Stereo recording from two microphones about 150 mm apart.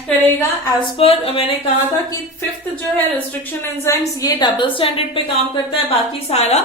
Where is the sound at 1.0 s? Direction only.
40° left (ahead or behind).